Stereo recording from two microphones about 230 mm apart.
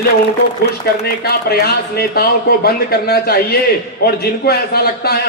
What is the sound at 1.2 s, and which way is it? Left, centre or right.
A man's voice, left.